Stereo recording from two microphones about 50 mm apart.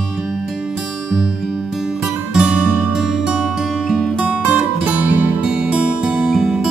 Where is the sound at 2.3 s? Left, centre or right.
Centre.